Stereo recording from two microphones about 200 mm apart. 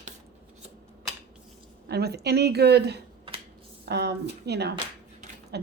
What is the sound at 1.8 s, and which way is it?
Speech, 55° right (ahead or behind).